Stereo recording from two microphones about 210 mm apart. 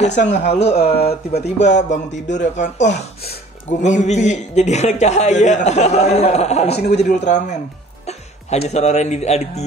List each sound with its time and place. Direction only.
0.0 s a man's voice: 35° left (ahead or behind)